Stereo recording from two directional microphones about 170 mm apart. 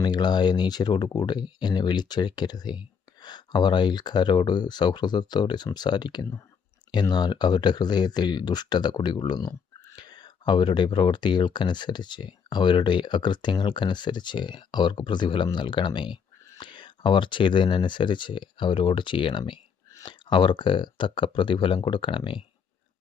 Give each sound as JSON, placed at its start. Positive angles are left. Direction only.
{"t": 0.0, "sound": "speech", "side_deg": 25}